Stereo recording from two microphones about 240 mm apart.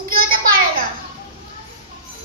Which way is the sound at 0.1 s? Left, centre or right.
Right.